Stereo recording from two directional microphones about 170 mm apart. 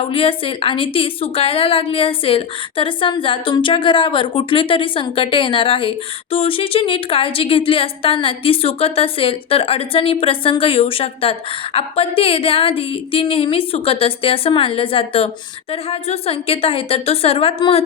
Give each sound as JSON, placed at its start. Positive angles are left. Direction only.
{"t": 0.1, "sound": "a woman's voice", "side_deg": 35}